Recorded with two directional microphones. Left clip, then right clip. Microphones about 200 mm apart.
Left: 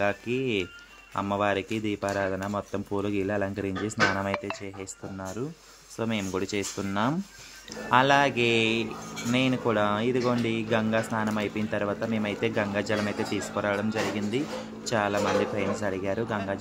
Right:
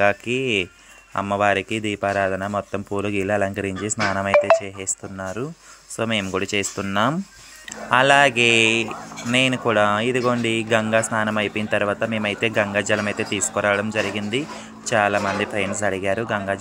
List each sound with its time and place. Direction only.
0.0 s speech: 20° right (ahead or behind)